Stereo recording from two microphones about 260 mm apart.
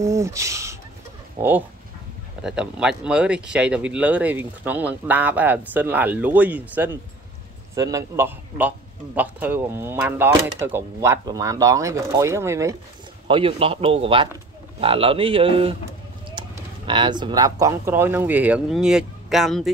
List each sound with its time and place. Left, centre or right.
0.0 s speech: centre
2.4 s a man's voice: centre